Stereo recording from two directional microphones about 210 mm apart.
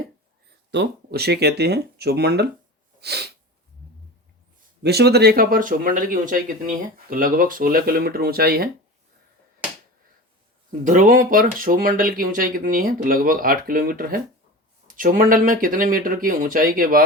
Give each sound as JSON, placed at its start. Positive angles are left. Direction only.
{"t": 0.7, "sound": "speech", "side_deg": -55}
{"t": 3.0, "sound": "sneeze", "side_deg": -50}
{"t": 4.8, "sound": "speech", "side_deg": -50}
{"t": 10.8, "sound": "speech", "side_deg": -40}